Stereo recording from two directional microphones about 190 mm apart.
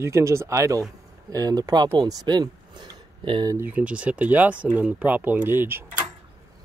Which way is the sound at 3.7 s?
5° right (ahead or behind).